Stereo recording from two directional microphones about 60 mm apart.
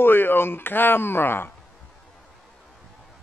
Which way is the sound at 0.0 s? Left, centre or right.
Left.